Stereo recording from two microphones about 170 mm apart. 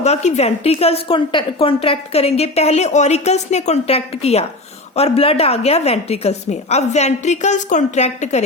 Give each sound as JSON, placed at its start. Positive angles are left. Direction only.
{"t": 0.0, "sound": "a woman's voice", "side_deg": 40}